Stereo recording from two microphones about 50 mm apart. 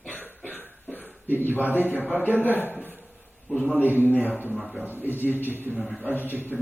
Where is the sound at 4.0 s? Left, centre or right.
Left.